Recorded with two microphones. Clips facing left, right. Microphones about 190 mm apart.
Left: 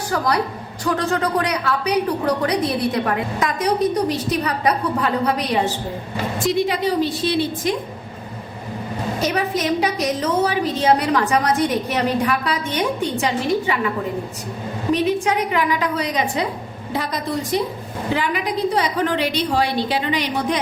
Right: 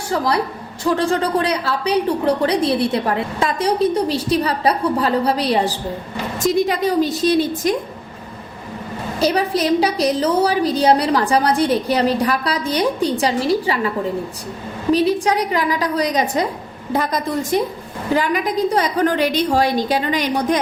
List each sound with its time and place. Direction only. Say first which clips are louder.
0.9 s a woman's voice: right 3 dB; 30° right (ahead or behind)
9.2 s a woman's voice: right 5 dB; 35° right (ahead or behind)
14.9 s a woman's voice: right 3 dB; 35° right (ahead or behind)